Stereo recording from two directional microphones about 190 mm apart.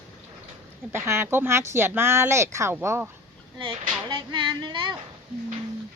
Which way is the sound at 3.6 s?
25° right (ahead or behind).